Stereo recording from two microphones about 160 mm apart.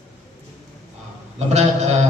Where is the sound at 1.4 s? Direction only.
45° right (ahead or behind).